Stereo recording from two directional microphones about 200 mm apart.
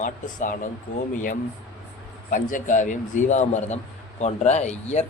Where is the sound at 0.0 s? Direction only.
40° left (ahead or behind).